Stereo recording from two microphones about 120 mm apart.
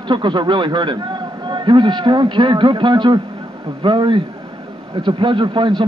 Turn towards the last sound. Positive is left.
turn(degrees=-40)  # may be behind; listen again after turning